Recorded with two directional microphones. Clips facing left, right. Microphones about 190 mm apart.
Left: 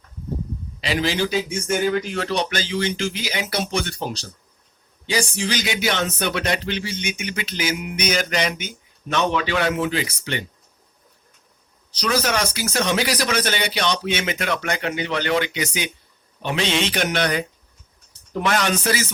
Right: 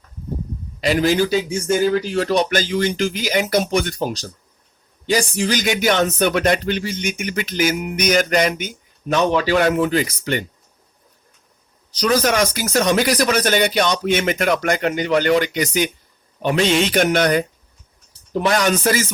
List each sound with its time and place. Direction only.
0.8 s speech: 45° right (ahead or behind)
1.5 s speech: 35° right (ahead or behind)
11.9 s speech: 45° right (ahead or behind)
18.3 s speech: 35° right (ahead or behind); by 19.0 s 50° right (ahead or behind)